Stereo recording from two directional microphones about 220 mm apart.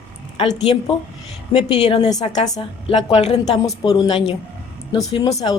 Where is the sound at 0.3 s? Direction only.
25° left (ahead or behind).